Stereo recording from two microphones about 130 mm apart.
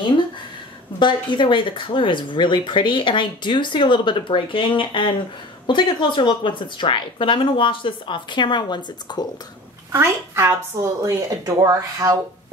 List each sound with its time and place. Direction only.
0.9 s speech: 35° left (ahead or behind)
9.9 s a woman's voice: 20° right (ahead or behind)